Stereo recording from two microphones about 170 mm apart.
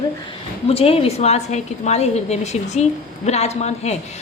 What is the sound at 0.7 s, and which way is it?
A woman's voice, 35° left (ahead or behind).